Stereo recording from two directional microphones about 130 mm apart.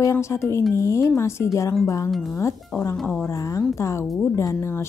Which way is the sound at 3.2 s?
25° left (ahead or behind).